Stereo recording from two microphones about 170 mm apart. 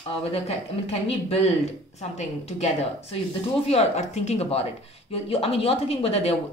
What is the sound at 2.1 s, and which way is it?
Speech, 40° left (ahead or behind).